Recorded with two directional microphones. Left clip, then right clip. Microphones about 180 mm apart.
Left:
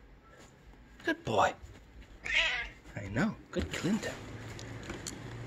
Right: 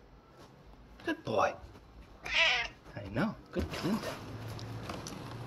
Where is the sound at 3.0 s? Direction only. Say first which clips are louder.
Left 1 dB; 25° left (ahead or behind).